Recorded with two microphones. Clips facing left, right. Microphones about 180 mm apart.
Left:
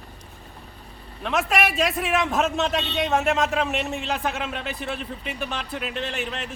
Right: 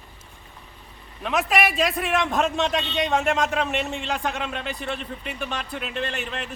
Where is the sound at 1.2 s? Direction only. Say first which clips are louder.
Right 1 dB; centre (ahead or behind).